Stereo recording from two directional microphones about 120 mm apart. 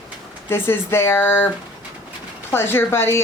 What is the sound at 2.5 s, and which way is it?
Speech, 20° left (ahead or behind).